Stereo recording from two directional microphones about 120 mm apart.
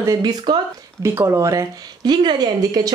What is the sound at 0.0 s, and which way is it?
Speech, 30° right (ahead or behind).